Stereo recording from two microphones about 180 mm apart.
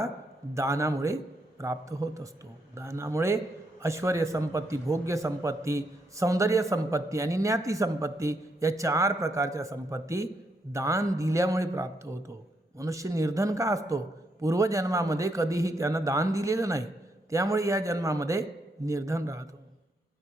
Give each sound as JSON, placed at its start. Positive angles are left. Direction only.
{"t": 0.5, "sound": "a man's voice", "side_deg": -15}